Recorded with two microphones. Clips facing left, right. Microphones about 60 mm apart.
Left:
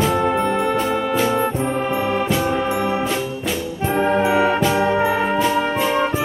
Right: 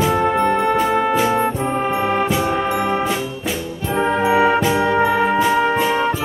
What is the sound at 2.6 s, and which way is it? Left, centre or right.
Music, right.